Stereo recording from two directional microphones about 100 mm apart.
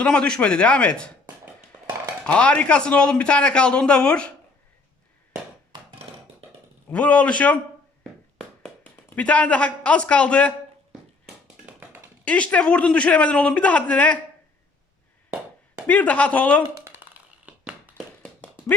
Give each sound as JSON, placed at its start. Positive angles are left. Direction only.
{"t": 0.0, "sound": "a man's voice", "side_deg": 10}
{"t": 2.2, "sound": "a man's voice", "side_deg": 10}
{"t": 6.9, "sound": "a man's voice", "side_deg": 15}
{"t": 9.0, "sound": "a man's voice", "side_deg": 15}
{"t": 12.2, "sound": "a man's voice", "side_deg": 15}
{"t": 15.9, "sound": "a man's voice", "side_deg": 15}
{"t": 16.8, "sound": "a sound", "side_deg": -15}